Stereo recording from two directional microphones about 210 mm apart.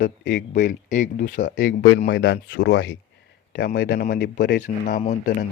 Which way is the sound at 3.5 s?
45° left (ahead or behind).